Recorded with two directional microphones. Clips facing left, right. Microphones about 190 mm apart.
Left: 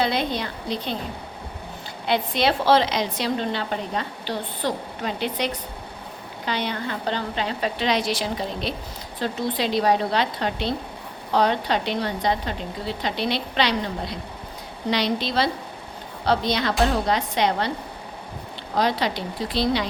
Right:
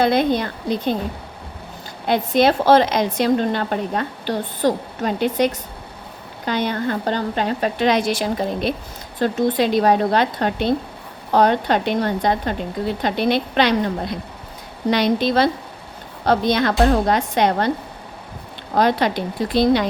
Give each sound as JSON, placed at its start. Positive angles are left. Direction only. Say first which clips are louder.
{"t": 0.0, "sound": "a woman's voice", "louder": "right 7 dB", "side_deg": -50}
{"t": 2.0, "sound": "a woman's voice", "louder": "right 6 dB", "side_deg": -45}
{"t": 18.7, "sound": "a woman's voice", "louder": "right 5 dB", "side_deg": -50}